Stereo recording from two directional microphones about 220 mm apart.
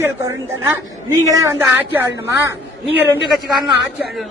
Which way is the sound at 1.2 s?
15° right (ahead or behind).